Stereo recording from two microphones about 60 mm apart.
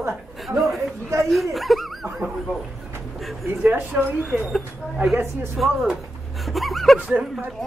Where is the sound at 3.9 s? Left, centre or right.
Right.